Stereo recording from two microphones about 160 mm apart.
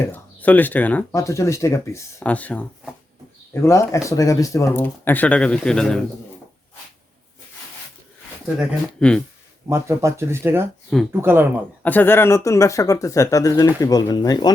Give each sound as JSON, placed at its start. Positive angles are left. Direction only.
{"t": 0.0, "sound": "speech", "side_deg": 10}
{"t": 8.4, "sound": "speech", "side_deg": -5}
{"t": 9.0, "sound": "speech", "side_deg": 5}
{"t": 9.6, "sound": "speech", "side_deg": -15}
{"t": 11.8, "sound": "speech", "side_deg": 10}